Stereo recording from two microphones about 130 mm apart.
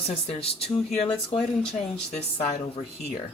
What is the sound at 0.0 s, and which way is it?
Speech, 50° left (ahead or behind).